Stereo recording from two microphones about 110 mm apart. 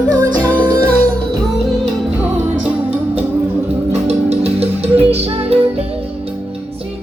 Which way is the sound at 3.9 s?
75° right (ahead or behind).